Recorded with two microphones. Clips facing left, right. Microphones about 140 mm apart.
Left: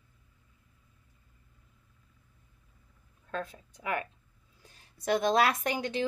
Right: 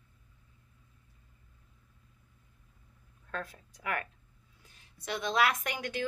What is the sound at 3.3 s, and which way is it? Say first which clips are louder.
Speech: left 3 dB; 25° left (ahead or behind).